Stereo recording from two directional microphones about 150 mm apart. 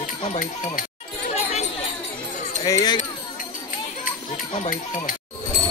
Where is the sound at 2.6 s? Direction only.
25° left (ahead or behind).